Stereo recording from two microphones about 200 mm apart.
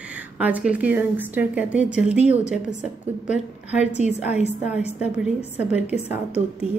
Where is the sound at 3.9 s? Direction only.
35° left (ahead or behind).